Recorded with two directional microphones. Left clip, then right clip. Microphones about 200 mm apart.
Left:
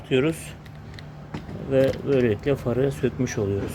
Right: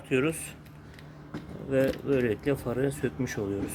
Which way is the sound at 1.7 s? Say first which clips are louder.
Left 5 dB; centre (ahead or behind).